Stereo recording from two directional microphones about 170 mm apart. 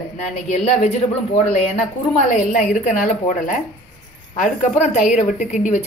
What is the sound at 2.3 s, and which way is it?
Speech, 50° left (ahead or behind).